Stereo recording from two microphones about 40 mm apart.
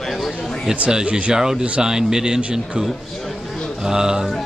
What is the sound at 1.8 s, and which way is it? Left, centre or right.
Speech, centre.